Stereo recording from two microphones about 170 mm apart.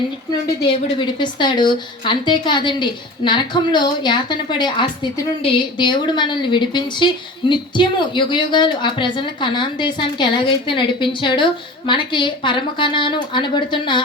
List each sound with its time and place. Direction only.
0.6 s a woman's voice: 30° left (ahead or behind)